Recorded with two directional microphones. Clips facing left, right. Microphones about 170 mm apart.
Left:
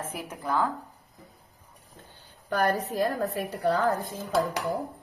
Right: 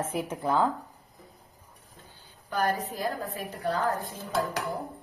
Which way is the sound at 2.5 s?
60° left (ahead or behind).